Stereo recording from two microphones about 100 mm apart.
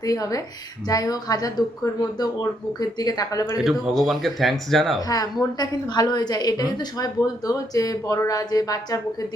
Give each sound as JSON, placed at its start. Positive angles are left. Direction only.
{"t": 0.0, "sound": "a woman's voice", "side_deg": 35}
{"t": 3.6, "sound": "speech", "side_deg": -5}
{"t": 4.9, "sound": "a woman's voice", "side_deg": 40}